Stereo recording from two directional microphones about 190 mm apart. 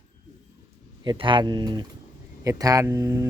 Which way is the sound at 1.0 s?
25° right (ahead or behind).